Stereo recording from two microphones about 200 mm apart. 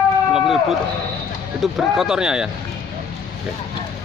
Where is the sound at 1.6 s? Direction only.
Centre (ahead or behind).